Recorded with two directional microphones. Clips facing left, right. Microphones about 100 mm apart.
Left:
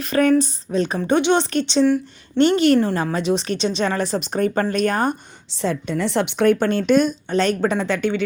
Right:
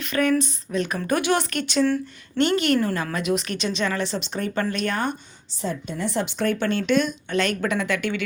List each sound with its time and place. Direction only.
0.0 s a woman's voice: 35° left (ahead or behind)
5.6 s a woman's voice: 90° left; by 8.2 s 30° left (ahead or behind)